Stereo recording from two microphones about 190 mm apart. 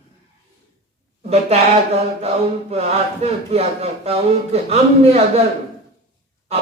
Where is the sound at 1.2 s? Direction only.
35° right (ahead or behind).